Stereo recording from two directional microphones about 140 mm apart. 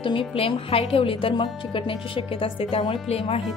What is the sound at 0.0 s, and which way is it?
A woman's voice, 40° left (ahead or behind).